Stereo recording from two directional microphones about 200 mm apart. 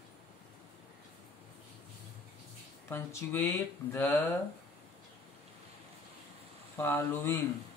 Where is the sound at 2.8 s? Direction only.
10° left (ahead or behind).